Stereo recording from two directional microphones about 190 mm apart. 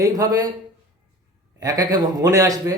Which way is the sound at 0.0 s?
20° right (ahead or behind).